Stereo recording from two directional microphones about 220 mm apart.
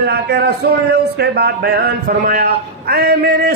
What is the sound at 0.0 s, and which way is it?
Speech, 45° right (ahead or behind).